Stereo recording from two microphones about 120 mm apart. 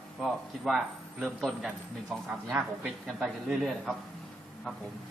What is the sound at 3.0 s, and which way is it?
Speech, centre (ahead or behind).